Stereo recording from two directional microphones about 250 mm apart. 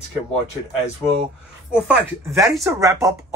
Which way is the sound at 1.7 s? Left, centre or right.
Centre.